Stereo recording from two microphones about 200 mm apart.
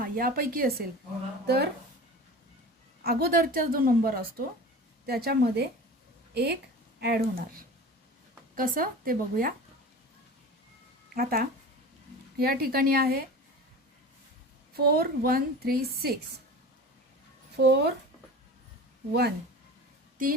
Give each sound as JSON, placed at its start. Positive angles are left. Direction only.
{"t": 0.0, "sound": "a woman's voice", "side_deg": -45}
{"t": 3.0, "sound": "a woman's voice", "side_deg": -50}
{"t": 11.1, "sound": "a woman's voice", "side_deg": -45}
{"t": 14.8, "sound": "a woman's voice", "side_deg": -50}
{"t": 17.6, "sound": "speech", "side_deg": -55}
{"t": 20.2, "sound": "a woman's voice", "side_deg": -45}